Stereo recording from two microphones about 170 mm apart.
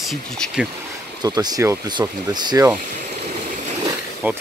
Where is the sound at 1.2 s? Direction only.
25° right (ahead or behind).